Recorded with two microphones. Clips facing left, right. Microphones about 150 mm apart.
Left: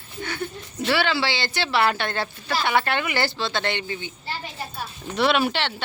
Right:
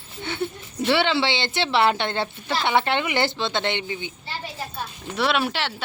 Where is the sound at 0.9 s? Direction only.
20° right (ahead or behind).